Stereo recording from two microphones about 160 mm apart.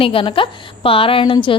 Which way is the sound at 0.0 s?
35° left (ahead or behind).